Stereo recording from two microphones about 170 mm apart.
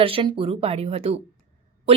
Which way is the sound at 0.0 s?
30° right (ahead or behind).